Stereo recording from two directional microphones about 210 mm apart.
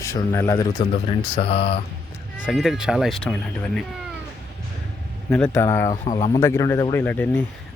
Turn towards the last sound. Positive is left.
turn(degrees=10)  # may be behind; listen again after turning